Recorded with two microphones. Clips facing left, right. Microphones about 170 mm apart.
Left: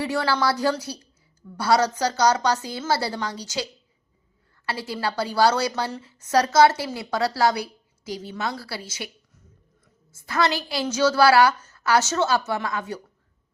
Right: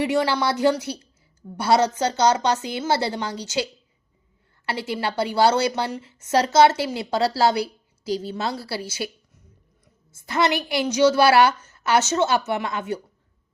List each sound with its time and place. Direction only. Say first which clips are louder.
0.0 s a woman's voice: right 2 dB; 20° right (ahead or behind)
10.2 s a woman's voice: right 2 dB; 20° right (ahead or behind)